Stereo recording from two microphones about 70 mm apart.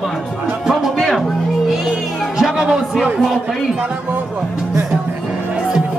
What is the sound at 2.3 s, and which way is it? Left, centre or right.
Music, centre.